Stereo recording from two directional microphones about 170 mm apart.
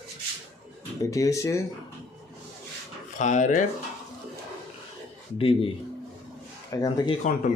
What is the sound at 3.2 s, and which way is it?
Speech, 45° left (ahead or behind).